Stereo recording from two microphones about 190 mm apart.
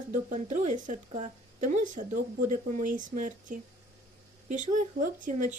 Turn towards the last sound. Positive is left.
turn(degrees=-40)  # may be behind; listen again after turning